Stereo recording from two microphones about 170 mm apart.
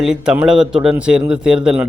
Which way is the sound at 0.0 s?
5° right (ahead or behind).